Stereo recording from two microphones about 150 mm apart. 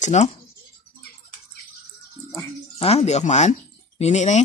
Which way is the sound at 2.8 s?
45° left (ahead or behind).